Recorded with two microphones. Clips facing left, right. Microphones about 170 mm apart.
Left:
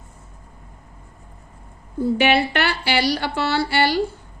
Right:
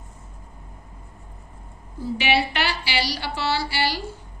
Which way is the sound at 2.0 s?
55° left (ahead or behind).